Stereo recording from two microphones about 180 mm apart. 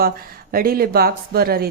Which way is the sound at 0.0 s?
55° right (ahead or behind).